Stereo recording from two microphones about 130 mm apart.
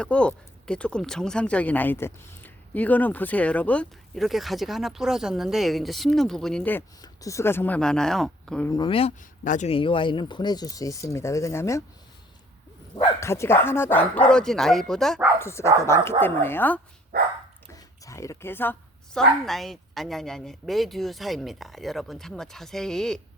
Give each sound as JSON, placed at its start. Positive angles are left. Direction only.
{"t": 0.0, "sound": "speech", "side_deg": 10}
{"t": 7.0, "sound": "speech", "side_deg": 25}
{"t": 8.9, "sound": "speech", "side_deg": 45}
{"t": 9.4, "sound": "speech", "side_deg": 80}
{"t": 9.6, "sound": "speech", "side_deg": 45}
{"t": 13.1, "sound": "speech", "side_deg": 20}
{"t": 15.4, "sound": "speech", "side_deg": 20}
{"t": 18.0, "sound": "speech", "side_deg": 25}
{"t": 19.1, "sound": "a woman's voice", "side_deg": 0}